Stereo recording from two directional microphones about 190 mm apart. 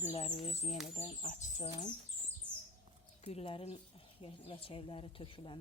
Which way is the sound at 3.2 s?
30° left (ahead or behind).